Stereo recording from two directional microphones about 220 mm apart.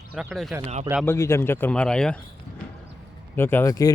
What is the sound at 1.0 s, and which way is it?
Speech, 10° left (ahead or behind).